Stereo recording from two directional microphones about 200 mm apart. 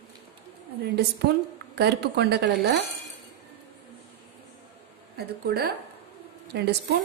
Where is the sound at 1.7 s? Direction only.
55° right (ahead or behind).